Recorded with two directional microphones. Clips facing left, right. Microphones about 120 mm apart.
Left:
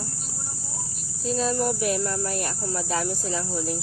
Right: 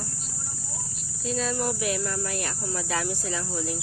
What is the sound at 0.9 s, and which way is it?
Speech, 40° left (ahead or behind).